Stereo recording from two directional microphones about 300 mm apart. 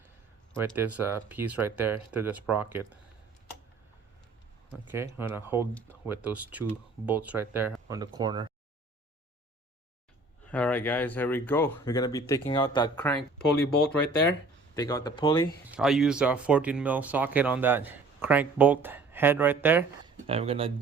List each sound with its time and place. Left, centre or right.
0.5 s speech: centre
4.9 s speech: centre
10.5 s speech: centre
14.8 s speech: centre
15.7 s speech: centre
20.2 s speech: centre